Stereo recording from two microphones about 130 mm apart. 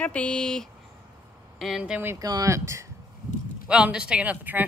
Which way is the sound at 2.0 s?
25° right (ahead or behind).